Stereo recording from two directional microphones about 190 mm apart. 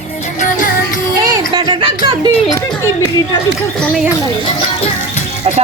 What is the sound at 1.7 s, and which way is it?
Speech, 25° right (ahead or behind).